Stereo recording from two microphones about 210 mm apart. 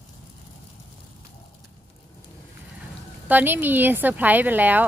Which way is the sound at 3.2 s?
10° right (ahead or behind).